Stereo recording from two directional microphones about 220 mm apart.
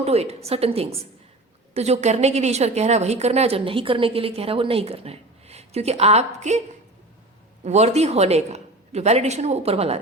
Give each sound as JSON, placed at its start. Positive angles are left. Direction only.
{"t": 0.0, "sound": "a woman's voice", "side_deg": -30}
{"t": 7.6, "sound": "a woman's voice", "side_deg": -30}